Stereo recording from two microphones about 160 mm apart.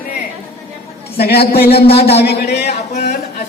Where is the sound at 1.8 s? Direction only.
40° left (ahead or behind).